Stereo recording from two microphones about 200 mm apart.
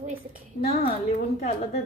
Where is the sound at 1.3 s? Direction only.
35° left (ahead or behind).